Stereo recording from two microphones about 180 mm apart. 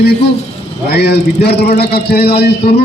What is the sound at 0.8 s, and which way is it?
A man's voice, 60° left (ahead or behind).